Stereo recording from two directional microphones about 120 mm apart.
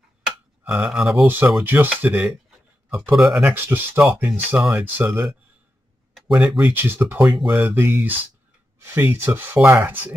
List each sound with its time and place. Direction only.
0.2 s a sound: 5° right (ahead or behind)
1.2 s speech: 15° right (ahead or behind)
3.5 s speech: 20° right (ahead or behind)
6.3 s speech: 10° right (ahead or behind)